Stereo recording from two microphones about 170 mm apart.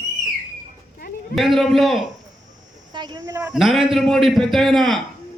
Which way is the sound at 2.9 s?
25° right (ahead or behind).